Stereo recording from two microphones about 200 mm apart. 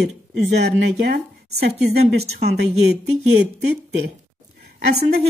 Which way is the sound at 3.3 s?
55° right (ahead or behind).